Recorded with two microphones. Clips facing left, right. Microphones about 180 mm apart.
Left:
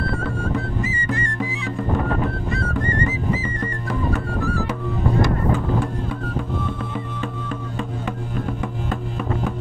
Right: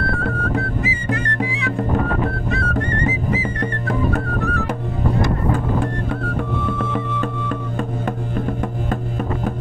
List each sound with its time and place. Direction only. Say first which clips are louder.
0.2 s music: right 2 dB; 65° right (ahead or behind)
6.8 s music: right 5 dB; 65° right (ahead or behind)